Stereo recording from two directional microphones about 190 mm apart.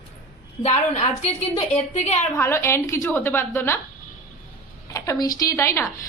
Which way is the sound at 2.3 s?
15° left (ahead or behind).